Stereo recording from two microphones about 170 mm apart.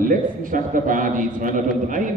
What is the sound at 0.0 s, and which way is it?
A man's voice, 55° right (ahead or behind).